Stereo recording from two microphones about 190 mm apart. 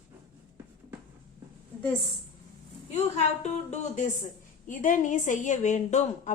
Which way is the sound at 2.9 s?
35° left (ahead or behind).